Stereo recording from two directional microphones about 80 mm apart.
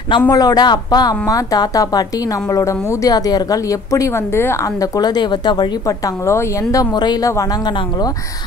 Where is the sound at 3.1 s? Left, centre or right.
Left.